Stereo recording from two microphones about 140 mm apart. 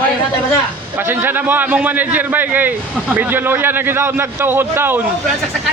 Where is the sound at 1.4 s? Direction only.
15° right (ahead or behind).